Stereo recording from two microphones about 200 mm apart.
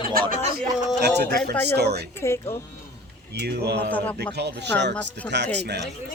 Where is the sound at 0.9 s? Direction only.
55° right (ahead or behind).